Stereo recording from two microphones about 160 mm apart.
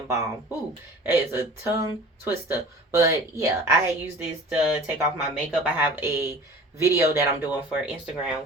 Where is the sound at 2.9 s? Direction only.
20° right (ahead or behind).